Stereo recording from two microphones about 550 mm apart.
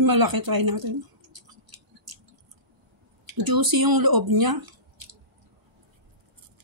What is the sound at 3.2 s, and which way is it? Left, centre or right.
Speech, right.